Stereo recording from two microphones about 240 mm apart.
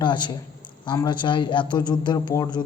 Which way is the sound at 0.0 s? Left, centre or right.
Centre.